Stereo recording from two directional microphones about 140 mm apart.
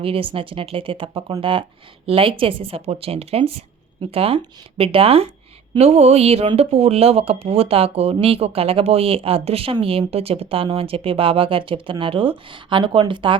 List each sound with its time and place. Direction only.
0.0 s speech: 40° right (ahead or behind)